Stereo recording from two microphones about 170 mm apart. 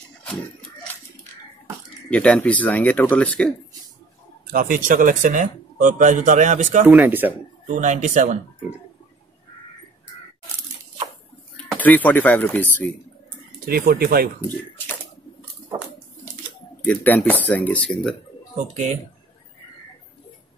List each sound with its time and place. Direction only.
0.2 s a sound: 5° left (ahead or behind)
2.0 s speech: 5° left (ahead or behind)
4.5 s speech: 55° right (ahead or behind)
6.9 s speech: 10° right (ahead or behind)
7.6 s speech: 45° right (ahead or behind)
11.5 s speech: 10° left (ahead or behind)
13.7 s speech: 60° right (ahead or behind)
16.8 s speech: 10° left (ahead or behind)